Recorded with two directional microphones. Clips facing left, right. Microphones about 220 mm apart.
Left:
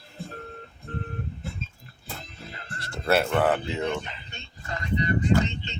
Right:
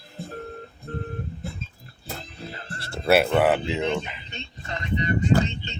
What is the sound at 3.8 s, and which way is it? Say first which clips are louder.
Speech: right 3 dB; 20° right (ahead or behind).